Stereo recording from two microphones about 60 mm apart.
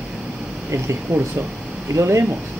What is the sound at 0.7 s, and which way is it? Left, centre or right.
Speech, right.